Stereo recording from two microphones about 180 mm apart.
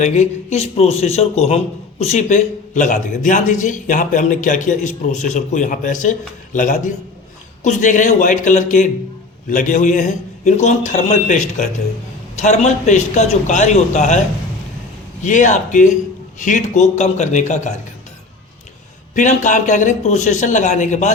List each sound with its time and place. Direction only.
0.0 s a man's voice: 40° left (ahead or behind)
15.2 s a man's voice: 45° left (ahead or behind)
19.1 s a man's voice: 45° left (ahead or behind)